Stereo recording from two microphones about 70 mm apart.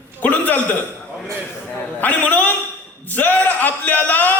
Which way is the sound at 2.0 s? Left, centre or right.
Left.